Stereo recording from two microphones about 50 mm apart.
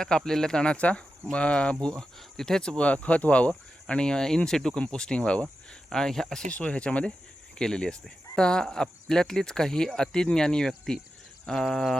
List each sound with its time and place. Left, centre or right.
0.3 s speech: centre
1.8 s speech: centre
5.9 s speech: centre
6.5 s speech: left